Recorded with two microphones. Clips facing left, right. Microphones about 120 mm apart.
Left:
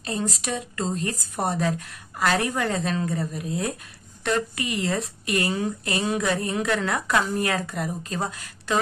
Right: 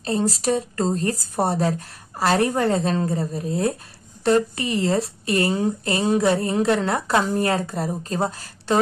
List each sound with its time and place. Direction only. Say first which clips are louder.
0.0 s a woman's voice: right 6 dB; 35° right (ahead or behind)